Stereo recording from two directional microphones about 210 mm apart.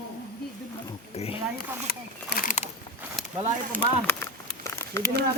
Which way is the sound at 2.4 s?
35° left (ahead or behind).